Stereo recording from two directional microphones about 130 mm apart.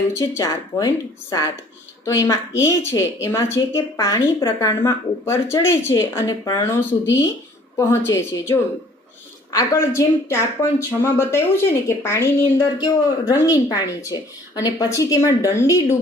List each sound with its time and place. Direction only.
0.1 s a woman's voice: 20° left (ahead or behind)